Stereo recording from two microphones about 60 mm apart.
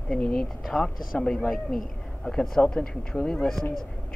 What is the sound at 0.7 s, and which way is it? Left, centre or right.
Speech, centre.